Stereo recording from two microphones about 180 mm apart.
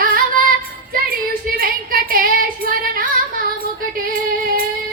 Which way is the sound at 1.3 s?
55° right (ahead or behind).